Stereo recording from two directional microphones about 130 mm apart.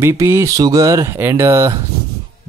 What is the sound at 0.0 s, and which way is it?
Speech, 20° right (ahead or behind).